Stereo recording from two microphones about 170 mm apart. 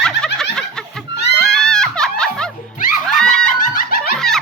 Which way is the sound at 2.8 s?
50° left (ahead or behind).